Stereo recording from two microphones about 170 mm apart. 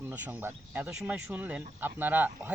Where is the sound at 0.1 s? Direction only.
10° right (ahead or behind).